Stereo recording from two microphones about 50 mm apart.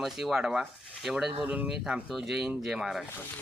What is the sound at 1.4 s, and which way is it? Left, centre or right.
Speech, right.